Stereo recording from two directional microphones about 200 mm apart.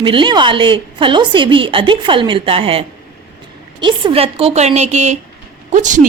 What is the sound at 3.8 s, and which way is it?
A woman's voice, 25° right (ahead or behind).